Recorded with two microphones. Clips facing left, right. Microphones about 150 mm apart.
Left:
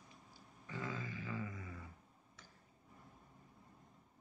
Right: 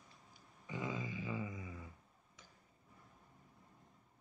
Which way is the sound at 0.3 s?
15° right (ahead or behind).